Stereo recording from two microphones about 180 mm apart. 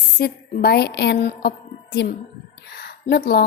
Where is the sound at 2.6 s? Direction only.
60° left (ahead or behind).